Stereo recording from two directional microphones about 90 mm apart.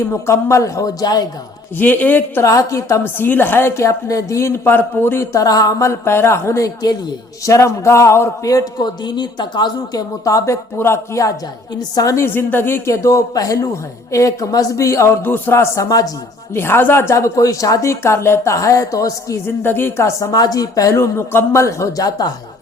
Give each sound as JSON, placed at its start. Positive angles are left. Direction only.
{"t": 0.0, "sound": "a woman's voice", "side_deg": 30}
{"t": 1.8, "sound": "a woman's voice", "side_deg": 20}
{"t": 2.4, "sound": "a woman's voice", "side_deg": 35}
{"t": 5.4, "sound": "a woman's voice", "side_deg": 40}
{"t": 10.2, "sound": "a woman's voice", "side_deg": 35}
{"t": 12.2, "sound": "a woman's voice", "side_deg": 25}
{"t": 15.2, "sound": "a woman's voice", "side_deg": 25}
{"t": 16.6, "sound": "a woman's voice", "side_deg": 25}
{"t": 19.6, "sound": "a woman's voice", "side_deg": 25}
{"t": 20.4, "sound": "a woman's voice", "side_deg": 45}